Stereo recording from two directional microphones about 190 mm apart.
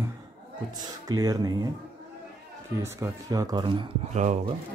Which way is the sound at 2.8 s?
15° right (ahead or behind).